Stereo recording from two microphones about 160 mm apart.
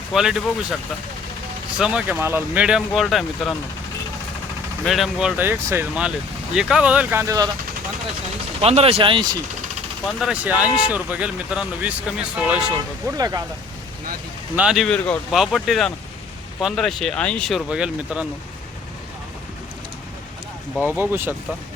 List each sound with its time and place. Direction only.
0.1 s speech: 5° right (ahead or behind)
1.8 s speech: 5° right (ahead or behind)
4.9 s speech: centre (ahead or behind); by 7.5 s 20° right (ahead or behind)
8.6 s speech: 40° right (ahead or behind)
10.2 s speech: 5° right (ahead or behind)
13.1 s speech: 20° right (ahead or behind)
14.5 s speech: 5° right (ahead or behind)
20.8 s speech: 10° right (ahead or behind)